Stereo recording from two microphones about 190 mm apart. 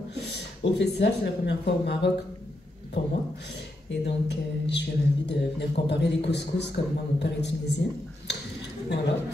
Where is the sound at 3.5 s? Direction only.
65° left (ahead or behind).